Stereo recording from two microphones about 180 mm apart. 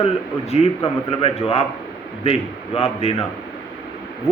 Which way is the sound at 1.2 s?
30° left (ahead or behind).